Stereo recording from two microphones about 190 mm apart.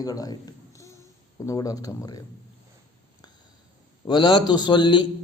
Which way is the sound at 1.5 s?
20° left (ahead or behind).